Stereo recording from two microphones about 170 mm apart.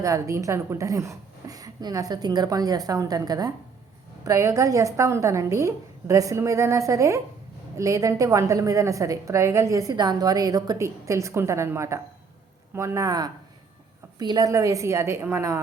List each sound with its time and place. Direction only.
0.0 s a woman's voice: 20° right (ahead or behind)